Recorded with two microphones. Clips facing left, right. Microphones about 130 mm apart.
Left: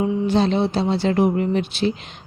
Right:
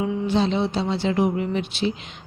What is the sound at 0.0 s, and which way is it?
Music, 40° left (ahead or behind).